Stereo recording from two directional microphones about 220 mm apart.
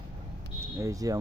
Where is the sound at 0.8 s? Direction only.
15° right (ahead or behind).